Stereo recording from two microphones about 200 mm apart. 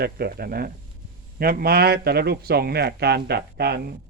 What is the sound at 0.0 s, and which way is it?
A man's voice, 50° right (ahead or behind).